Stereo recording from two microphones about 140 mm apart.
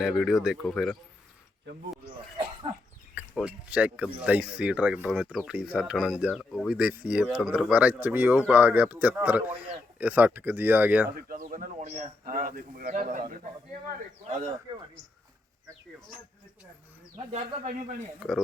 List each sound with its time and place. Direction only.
0.0 s speech: 5° right (ahead or behind)
3.2 s speech: 10° right (ahead or behind)
11.1 s speech: 90° right
14.3 s speech: 60° right (ahead or behind)
17.3 s speech: 65° right (ahead or behind)
18.2 s speech: centre (ahead or behind)